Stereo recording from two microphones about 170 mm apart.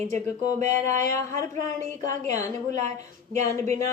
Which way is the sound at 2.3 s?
45° right (ahead or behind).